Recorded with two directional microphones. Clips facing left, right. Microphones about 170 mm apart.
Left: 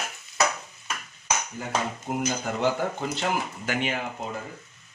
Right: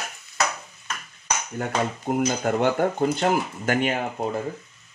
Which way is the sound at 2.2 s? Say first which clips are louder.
Right 4 dB; 60° right (ahead or behind).